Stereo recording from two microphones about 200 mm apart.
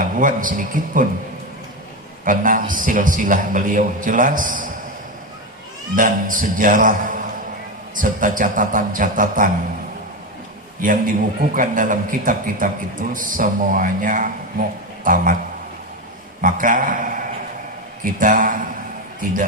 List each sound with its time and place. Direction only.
0.0 s a man's voice: 40° right (ahead or behind)
2.2 s a man's voice: 40° right (ahead or behind)
6.0 s a man's voice: 40° right (ahead or behind)
10.8 s a man's voice: 45° right (ahead or behind)
16.4 s a man's voice: 40° right (ahead or behind)